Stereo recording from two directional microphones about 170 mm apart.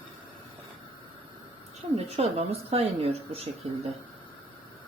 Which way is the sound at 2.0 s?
35° right (ahead or behind).